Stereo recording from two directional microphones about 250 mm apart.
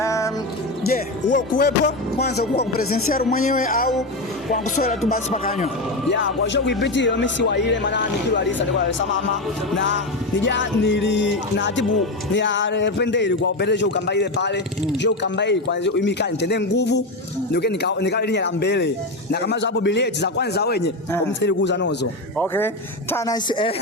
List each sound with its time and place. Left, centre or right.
0.0 s music: centre
0.9 s music: left
6.1 s speech: left
19.3 s music: left
21.4 s speech: left
22.4 s speech: centre